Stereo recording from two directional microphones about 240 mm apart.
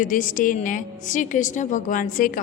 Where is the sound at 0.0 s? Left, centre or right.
Left.